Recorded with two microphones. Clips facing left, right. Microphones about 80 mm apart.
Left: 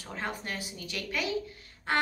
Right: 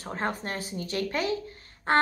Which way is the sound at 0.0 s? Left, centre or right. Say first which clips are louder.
Right 5 dB; right.